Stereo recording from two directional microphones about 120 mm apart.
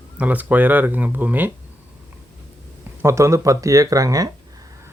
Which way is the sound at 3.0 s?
25° right (ahead or behind).